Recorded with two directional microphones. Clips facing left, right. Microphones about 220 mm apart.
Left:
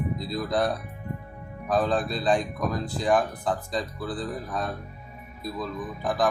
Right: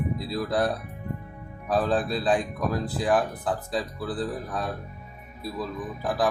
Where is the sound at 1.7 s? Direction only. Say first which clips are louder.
Even; 5° right (ahead or behind).